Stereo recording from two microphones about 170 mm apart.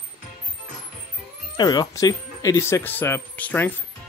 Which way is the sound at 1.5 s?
25° left (ahead or behind).